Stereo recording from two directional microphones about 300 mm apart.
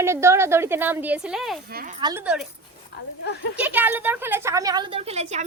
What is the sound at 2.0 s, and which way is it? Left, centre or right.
Speech, centre.